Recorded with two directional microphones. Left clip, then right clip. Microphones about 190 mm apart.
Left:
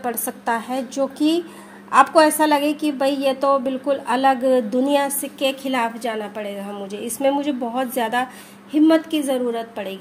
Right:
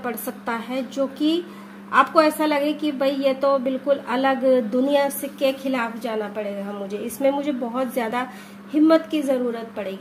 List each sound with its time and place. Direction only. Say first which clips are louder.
0.0 s a woman's voice: left 3 dB; 30° left (ahead or behind)